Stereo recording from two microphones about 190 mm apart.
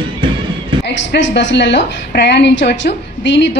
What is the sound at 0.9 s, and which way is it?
A woman's voice, 70° left (ahead or behind).